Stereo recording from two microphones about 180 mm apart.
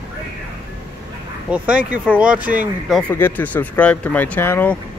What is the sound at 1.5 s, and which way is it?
Speech, 5° right (ahead or behind).